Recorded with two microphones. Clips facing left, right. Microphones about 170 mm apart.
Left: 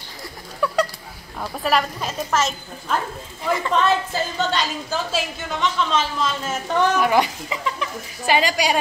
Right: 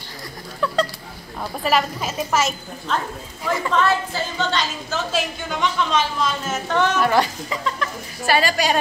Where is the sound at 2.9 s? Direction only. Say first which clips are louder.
Left 1 dB; 10° left (ahead or behind).